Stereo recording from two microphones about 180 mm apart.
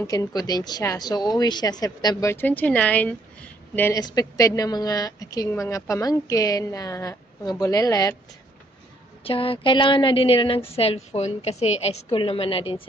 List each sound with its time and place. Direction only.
0.0 s a woman's voice: 20° left (ahead or behind)
9.2 s a woman's voice: 30° left (ahead or behind)